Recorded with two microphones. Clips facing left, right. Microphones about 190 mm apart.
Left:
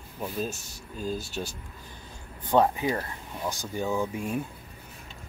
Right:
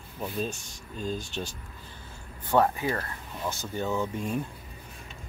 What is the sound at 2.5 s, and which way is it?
Speech, 15° left (ahead or behind).